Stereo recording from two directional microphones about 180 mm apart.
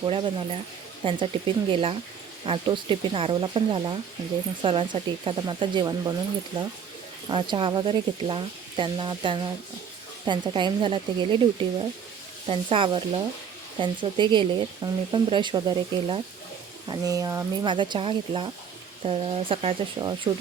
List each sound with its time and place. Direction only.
0.0 s speech: 25° right (ahead or behind)
7.3 s speech: 25° right (ahead or behind)